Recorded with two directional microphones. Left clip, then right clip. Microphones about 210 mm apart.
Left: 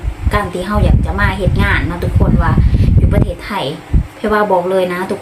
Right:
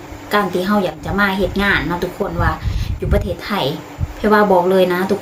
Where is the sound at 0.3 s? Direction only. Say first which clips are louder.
Right 1 dB; 10° right (ahead or behind).